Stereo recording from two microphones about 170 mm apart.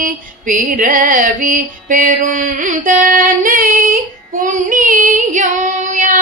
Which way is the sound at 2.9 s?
55° right (ahead or behind).